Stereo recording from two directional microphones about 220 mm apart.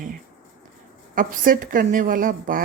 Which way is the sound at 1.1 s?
40° right (ahead or behind).